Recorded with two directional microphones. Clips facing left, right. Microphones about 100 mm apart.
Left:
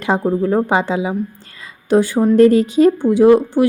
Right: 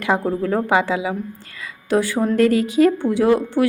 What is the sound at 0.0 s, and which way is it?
A woman's voice, 20° left (ahead or behind).